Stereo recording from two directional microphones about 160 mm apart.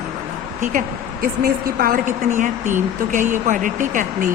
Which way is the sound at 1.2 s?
65° right (ahead or behind).